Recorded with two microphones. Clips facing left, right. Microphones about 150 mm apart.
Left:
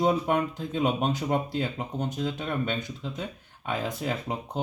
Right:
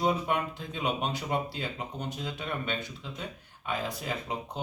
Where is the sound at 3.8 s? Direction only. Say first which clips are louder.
Left 4 dB; 50° left (ahead or behind).